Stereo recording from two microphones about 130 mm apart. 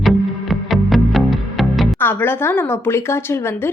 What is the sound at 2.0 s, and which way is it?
A woman's voice, 15° left (ahead or behind).